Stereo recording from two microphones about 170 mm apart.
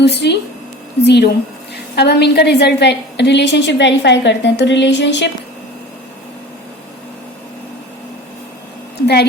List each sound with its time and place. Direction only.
0.0 s speech: 85° left
2.0 s a woman's voice: 75° left (ahead or behind); by 5.3 s 90° left